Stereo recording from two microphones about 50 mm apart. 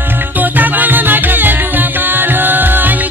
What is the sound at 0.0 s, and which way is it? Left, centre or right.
Music, right.